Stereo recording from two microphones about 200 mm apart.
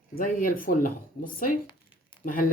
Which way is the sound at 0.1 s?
45° left (ahead or behind).